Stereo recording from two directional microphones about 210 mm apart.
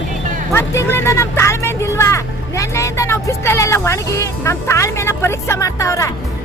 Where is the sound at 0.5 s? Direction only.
10° left (ahead or behind).